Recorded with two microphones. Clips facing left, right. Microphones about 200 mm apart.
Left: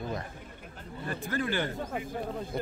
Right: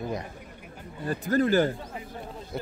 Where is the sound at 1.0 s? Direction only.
40° right (ahead or behind).